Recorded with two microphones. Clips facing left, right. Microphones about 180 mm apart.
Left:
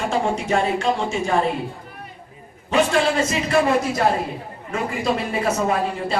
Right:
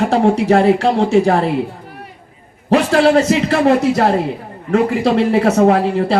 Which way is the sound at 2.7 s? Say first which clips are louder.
Right 7 dB; 65° right (ahead or behind).